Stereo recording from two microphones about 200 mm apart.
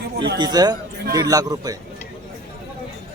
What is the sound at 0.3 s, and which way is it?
Speech, 20° right (ahead or behind).